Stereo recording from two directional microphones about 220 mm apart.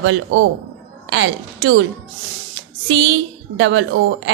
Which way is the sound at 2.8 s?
55° right (ahead or behind).